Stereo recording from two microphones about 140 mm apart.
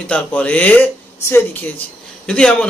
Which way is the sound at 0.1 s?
10° left (ahead or behind).